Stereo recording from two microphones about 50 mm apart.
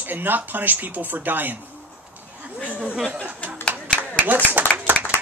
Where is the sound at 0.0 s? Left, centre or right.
Right.